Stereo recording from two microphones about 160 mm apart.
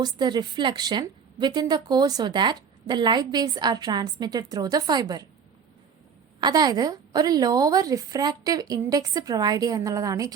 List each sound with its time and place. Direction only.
0.0 s a woman's voice: 25° right (ahead or behind)
6.4 s a woman's voice: 25° right (ahead or behind)